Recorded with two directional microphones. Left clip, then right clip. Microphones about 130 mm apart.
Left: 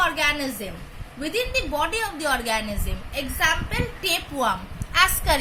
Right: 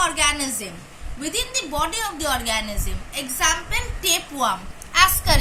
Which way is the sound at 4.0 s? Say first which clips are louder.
Right 2 dB; 75° left (ahead or behind).